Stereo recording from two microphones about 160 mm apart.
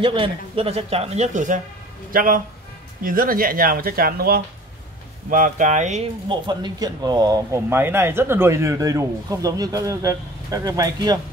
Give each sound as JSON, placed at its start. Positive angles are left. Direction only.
{"t": 0.0, "sound": "speech", "side_deg": -35}
{"t": 5.3, "sound": "speech", "side_deg": -55}
{"t": 6.2, "sound": "speech", "side_deg": -30}
{"t": 7.7, "sound": "speech", "side_deg": -15}